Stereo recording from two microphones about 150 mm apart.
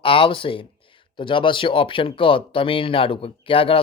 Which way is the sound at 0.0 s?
35° left (ahead or behind).